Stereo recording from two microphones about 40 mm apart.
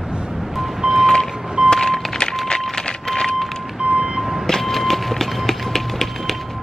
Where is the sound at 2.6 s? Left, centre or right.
Centre.